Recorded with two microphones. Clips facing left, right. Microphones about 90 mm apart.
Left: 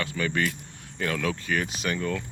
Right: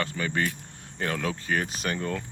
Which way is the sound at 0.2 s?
25° right (ahead or behind).